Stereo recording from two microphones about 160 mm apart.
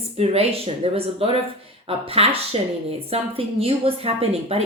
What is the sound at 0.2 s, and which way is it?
A woman's voice, 35° right (ahead or behind).